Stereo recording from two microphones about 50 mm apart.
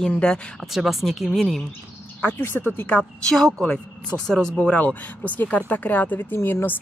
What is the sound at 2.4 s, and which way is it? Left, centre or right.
Speech, left.